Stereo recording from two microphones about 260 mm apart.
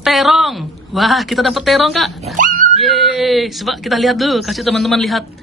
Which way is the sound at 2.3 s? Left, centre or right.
Right.